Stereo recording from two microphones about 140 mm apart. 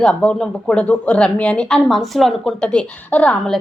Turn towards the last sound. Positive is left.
turn(degrees=10)  # may be behind; listen again after turning